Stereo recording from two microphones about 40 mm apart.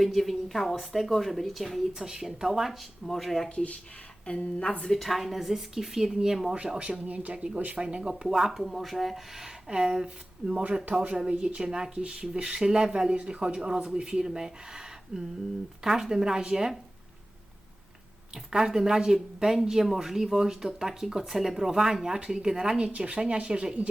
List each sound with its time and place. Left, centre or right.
0.0 s a woman's voice: centre
1.9 s speech: centre
3.1 s a woman's voice: centre
3.5 s a woman's voice: left
4.9 s speech: centre
6.7 s speech: right
7.3 s speech: right
8.3 s speech: centre
8.6 s a woman's voice: centre
9.6 s speech: centre
18.5 s speech: centre
22.8 s speech: right